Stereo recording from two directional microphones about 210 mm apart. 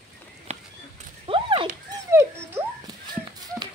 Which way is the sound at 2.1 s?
15° right (ahead or behind).